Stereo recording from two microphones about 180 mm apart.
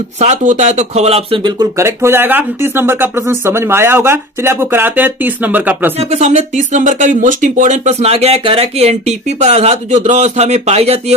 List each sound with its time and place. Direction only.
0.2 s speech: 40° right (ahead or behind); by 5.9 s 10° right (ahead or behind)
6.0 s speech: 35° right (ahead or behind)